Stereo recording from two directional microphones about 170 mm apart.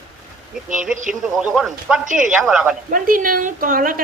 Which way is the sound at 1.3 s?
Centre (ahead or behind).